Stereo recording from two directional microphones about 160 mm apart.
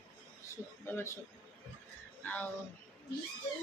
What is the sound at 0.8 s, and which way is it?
Speech, 15° left (ahead or behind).